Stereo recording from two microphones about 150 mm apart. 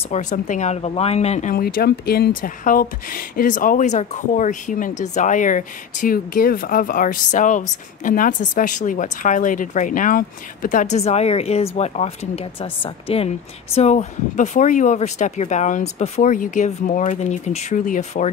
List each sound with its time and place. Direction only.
0.1 s speech: 55° left (ahead or behind)
1.5 s speech: 80° left; by 13.3 s 40° left (ahead or behind)
13.7 s speech: 50° left (ahead or behind)